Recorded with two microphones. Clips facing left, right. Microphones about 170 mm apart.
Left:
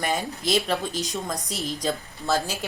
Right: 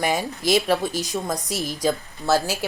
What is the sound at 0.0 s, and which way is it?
A woman's voice, 10° right (ahead or behind).